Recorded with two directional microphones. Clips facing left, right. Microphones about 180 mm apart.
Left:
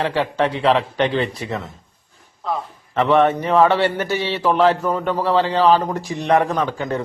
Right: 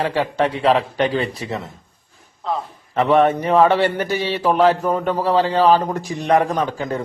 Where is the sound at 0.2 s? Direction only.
35° right (ahead or behind).